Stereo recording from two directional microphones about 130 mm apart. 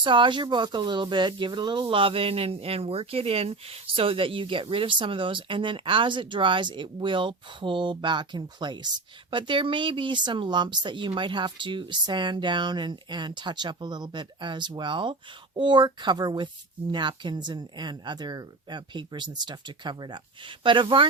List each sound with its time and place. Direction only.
0.0 s speech: 40° right (ahead or behind)